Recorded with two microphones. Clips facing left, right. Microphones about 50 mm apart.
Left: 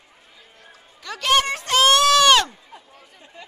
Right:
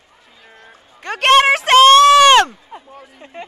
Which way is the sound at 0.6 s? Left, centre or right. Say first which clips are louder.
Right 8 dB; right.